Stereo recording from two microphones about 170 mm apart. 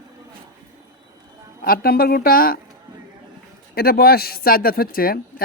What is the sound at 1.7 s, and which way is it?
Speech, 60° left (ahead or behind).